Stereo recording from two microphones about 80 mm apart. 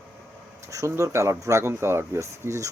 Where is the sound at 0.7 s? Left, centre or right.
Right.